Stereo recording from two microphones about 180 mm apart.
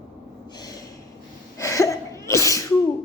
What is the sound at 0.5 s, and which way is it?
Snort, 20° left (ahead or behind).